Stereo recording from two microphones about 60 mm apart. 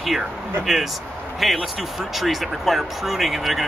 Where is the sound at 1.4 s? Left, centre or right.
Centre.